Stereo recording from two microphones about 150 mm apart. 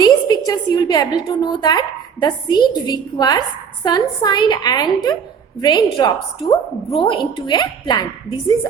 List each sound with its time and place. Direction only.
0.0 s a woman's voice: 25° left (ahead or behind)